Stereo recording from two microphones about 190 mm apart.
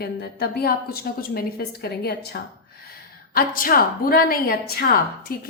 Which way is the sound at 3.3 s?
45° left (ahead or behind).